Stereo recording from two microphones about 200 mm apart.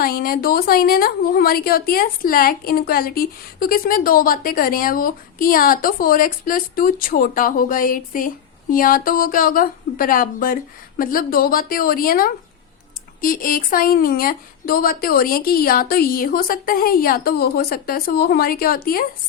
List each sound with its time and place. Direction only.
0.0 s a woman's voice: 45° left (ahead or behind)